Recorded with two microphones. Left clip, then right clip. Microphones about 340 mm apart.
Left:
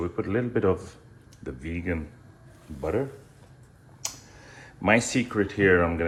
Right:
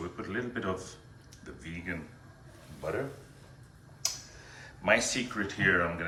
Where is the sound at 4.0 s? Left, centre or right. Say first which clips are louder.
Right 1 dB; centre.